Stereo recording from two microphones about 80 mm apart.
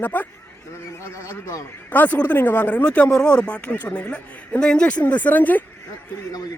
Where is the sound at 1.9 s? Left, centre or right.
Left.